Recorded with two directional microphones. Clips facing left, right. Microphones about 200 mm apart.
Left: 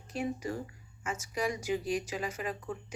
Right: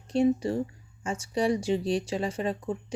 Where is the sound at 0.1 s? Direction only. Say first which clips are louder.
Right 11 dB; 30° right (ahead or behind).